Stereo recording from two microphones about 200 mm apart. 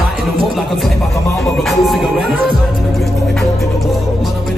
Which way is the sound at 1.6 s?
Centre (ahead or behind).